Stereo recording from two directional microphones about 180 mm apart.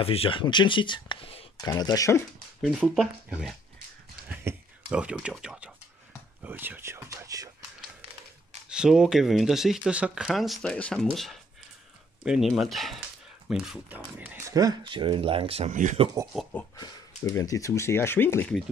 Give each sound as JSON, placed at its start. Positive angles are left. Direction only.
{"t": 0.0, "sound": "speech", "side_deg": 30}
{"t": 2.6, "sound": "speech", "side_deg": 0}
{"t": 4.5, "sound": "a sound", "side_deg": -15}
{"t": 4.8, "sound": "speech", "side_deg": 0}
{"t": 8.6, "sound": "speech", "side_deg": -5}
{"t": 12.3, "sound": "speech", "side_deg": 0}
{"t": 14.6, "sound": "speech", "side_deg": -25}
{"t": 16.7, "sound": "speech", "side_deg": 20}